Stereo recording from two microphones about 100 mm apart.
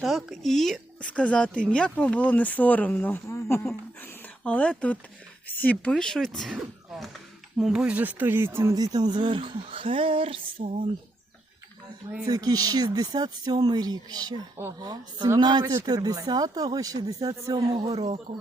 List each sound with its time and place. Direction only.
0.0 s speech: centre (ahead or behind)
1.0 s speech: 15° left (ahead or behind)
3.2 s speech: 30° left (ahead or behind)
4.0 s speech: 15° left (ahead or behind); by 8.7 s 25° right (ahead or behind)
8.7 s speech: 40° right (ahead or behind); by 10.8 s 85° right
12.3 s speech: 40° right (ahead or behind)
18.3 s speech: 50° right (ahead or behind)